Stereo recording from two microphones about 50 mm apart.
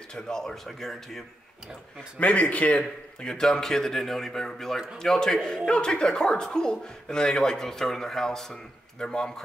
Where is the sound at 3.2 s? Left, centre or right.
Centre.